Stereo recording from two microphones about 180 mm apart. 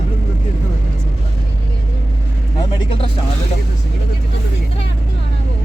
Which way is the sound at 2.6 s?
25° left (ahead or behind).